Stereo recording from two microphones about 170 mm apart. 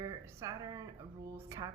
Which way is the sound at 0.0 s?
20° right (ahead or behind).